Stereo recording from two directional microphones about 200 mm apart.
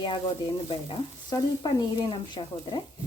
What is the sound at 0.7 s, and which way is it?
Speech, 25° left (ahead or behind).